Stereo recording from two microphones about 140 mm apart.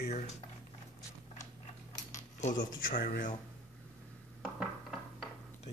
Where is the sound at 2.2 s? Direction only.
60° left (ahead or behind); by 3.4 s 80° left.